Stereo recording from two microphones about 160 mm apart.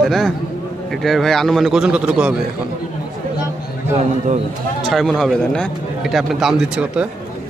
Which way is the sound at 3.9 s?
45° right (ahead or behind).